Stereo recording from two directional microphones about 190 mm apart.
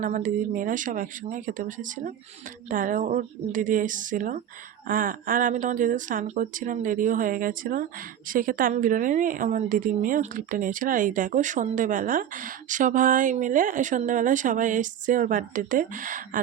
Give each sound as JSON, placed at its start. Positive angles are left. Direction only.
{"t": 0.0, "sound": "a woman's voice", "side_deg": -45}